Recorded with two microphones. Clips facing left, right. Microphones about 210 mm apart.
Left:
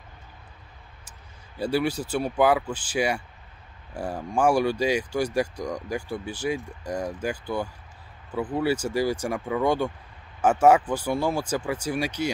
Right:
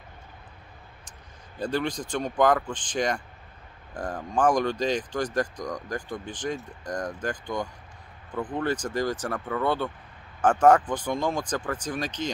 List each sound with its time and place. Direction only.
1.6 s speech: 10° left (ahead or behind)